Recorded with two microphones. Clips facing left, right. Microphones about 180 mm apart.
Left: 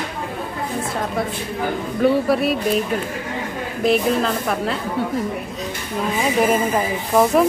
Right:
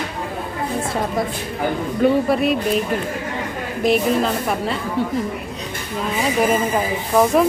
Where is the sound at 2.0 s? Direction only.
Centre (ahead or behind).